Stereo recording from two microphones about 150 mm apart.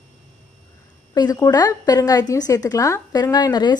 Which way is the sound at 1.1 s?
25° left (ahead or behind).